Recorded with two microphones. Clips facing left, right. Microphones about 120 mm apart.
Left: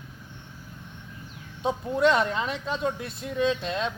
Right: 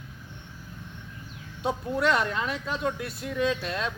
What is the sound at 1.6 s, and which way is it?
Speech, 25° left (ahead or behind).